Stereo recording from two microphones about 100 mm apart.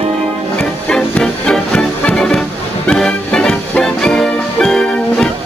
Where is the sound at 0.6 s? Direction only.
10° left (ahead or behind).